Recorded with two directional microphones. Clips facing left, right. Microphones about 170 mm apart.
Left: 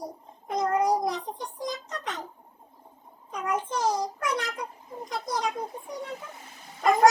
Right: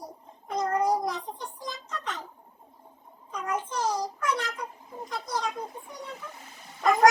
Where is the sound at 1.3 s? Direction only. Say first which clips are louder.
Left 3 dB; 15° left (ahead or behind).